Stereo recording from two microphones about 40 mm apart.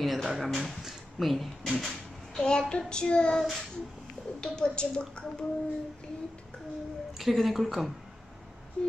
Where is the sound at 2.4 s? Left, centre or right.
Centre.